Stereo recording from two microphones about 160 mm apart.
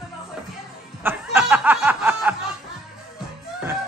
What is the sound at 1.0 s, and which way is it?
Snicker, 10° right (ahead or behind).